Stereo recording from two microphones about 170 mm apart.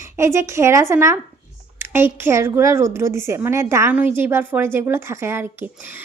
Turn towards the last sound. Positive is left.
turn(degrees=-15)  # may be behind; listen again after turning